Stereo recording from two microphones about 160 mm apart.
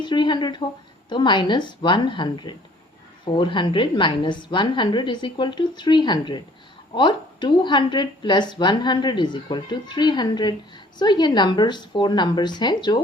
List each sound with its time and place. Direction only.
0.0 s a woman's voice: 30° left (ahead or behind)